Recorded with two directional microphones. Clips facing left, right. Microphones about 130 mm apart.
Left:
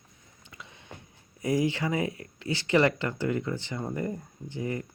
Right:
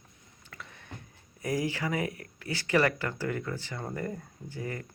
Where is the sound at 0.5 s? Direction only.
20° left (ahead or behind).